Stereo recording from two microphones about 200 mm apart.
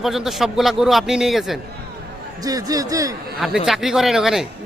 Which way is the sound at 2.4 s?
20° right (ahead or behind).